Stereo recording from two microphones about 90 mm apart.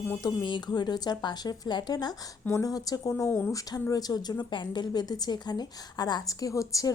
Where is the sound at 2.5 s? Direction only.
40° left (ahead or behind).